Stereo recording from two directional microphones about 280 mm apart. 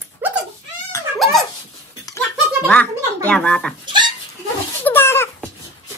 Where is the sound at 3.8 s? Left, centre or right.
Centre.